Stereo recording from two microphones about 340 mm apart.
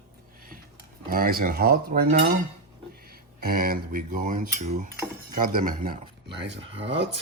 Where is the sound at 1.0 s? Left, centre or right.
Right.